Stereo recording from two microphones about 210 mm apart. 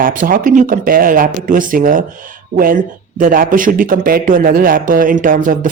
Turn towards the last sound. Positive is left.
turn(degrees=-40)  # may be behind; listen again after turning